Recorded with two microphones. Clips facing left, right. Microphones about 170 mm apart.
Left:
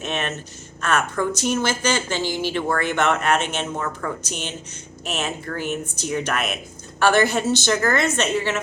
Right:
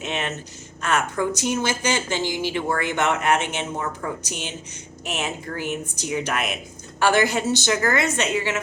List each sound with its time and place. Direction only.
0.0 s a woman's voice: 15° right (ahead or behind)